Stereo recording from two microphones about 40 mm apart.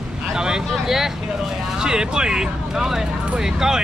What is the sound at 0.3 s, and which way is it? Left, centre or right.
Vehicle, centre.